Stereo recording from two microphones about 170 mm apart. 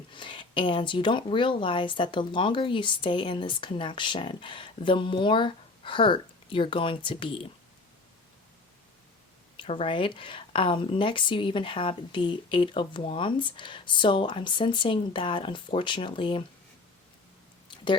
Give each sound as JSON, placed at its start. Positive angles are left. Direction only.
{"t": 0.1, "sound": "speech", "side_deg": 30}
{"t": 9.6, "sound": "speech", "side_deg": 30}